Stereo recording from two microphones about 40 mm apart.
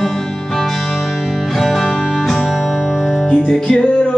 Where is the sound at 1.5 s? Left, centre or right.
Centre.